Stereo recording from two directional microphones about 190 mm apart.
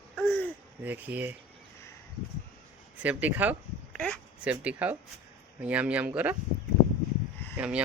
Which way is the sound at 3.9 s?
5° left (ahead or behind).